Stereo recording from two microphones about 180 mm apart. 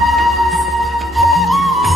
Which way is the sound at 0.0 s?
Centre (ahead or behind).